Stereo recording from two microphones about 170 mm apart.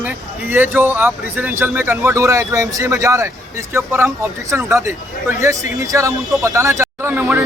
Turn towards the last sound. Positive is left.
turn(degrees=-15)  # may be behind; listen again after turning